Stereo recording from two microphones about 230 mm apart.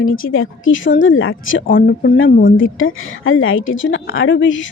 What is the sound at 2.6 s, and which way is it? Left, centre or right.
A woman's voice, left.